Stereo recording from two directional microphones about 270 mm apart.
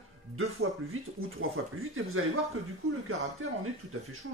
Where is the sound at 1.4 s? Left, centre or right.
Right.